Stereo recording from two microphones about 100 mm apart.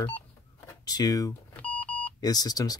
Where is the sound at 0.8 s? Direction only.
40° left (ahead or behind).